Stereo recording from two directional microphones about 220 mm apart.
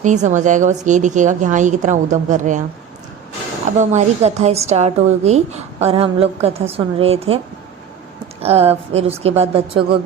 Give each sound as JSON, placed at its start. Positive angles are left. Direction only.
{"t": 0.0, "sound": "a woman's voice", "side_deg": -35}
{"t": 3.8, "sound": "a woman's voice", "side_deg": -30}
{"t": 8.4, "sound": "a woman's voice", "side_deg": -25}